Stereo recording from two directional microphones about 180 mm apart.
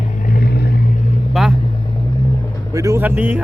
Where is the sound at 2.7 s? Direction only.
20° right (ahead or behind).